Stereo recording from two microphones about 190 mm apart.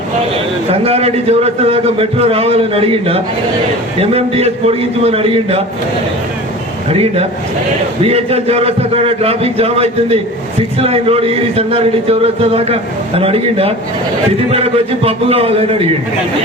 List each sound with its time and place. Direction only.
0.7 s speech: 30° right (ahead or behind)
6.9 s speech: 30° right (ahead or behind)